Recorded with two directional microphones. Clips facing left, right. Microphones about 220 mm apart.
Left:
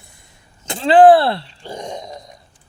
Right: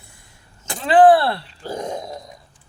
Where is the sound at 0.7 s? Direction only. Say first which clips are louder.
Left 3 dB; 25° left (ahead or behind).